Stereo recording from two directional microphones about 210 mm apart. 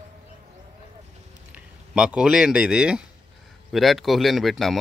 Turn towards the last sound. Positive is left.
turn(degrees=0)  # may be behind; listen again after turning